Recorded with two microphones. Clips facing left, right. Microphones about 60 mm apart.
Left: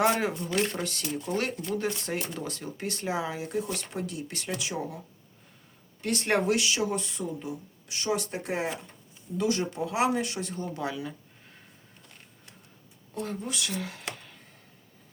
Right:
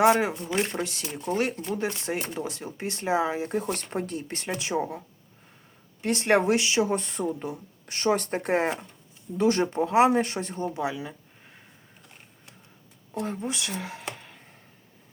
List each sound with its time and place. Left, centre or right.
0.0 s speech: centre
3.6 s speech: right
6.0 s speech: right
13.2 s speech: right